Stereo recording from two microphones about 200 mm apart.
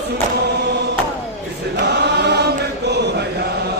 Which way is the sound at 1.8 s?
55° right (ahead or behind).